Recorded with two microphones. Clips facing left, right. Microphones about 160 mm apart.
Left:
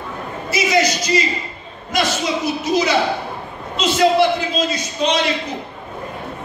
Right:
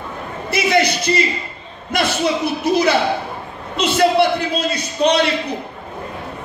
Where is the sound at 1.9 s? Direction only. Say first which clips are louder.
Even; 60° right (ahead or behind).